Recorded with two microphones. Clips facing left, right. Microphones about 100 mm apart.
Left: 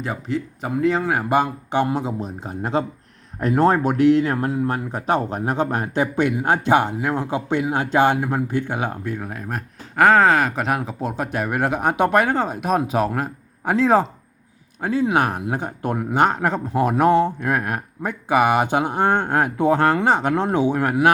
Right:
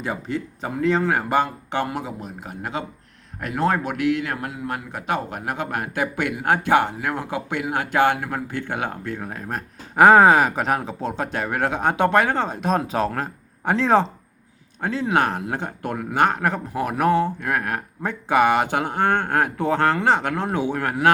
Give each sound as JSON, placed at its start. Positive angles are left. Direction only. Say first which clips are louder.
{"t": 0.0, "sound": "speech", "louder": "left 1 dB", "side_deg": 0}
{"t": 9.1, "sound": "speech", "louder": "left 1 dB", "side_deg": 5}
{"t": 9.9, "sound": "speech", "louder": "right 2 dB", "side_deg": -10}